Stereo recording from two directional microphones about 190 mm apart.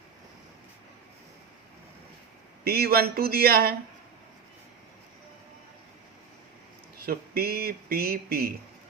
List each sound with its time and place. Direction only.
2.6 s speech: 55° right (ahead or behind)
7.0 s speech: 50° right (ahead or behind)